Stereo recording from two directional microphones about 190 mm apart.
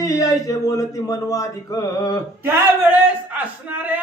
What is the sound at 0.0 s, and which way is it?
Speech, 20° left (ahead or behind).